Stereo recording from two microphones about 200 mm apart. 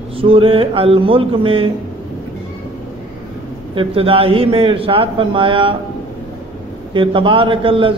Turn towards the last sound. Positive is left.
turn(degrees=-25)  # may be behind; listen again after turning